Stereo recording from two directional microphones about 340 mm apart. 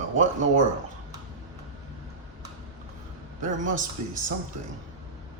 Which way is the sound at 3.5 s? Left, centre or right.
Right.